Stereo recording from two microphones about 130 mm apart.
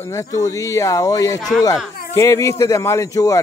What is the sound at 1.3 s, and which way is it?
Speech, centre (ahead or behind).